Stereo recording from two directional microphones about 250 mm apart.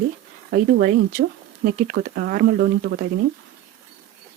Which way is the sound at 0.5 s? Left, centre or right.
Right.